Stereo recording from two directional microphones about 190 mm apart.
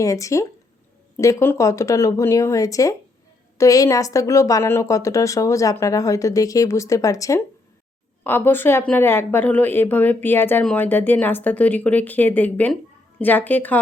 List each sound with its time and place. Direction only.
0.0 s a woman's voice: 15° left (ahead or behind)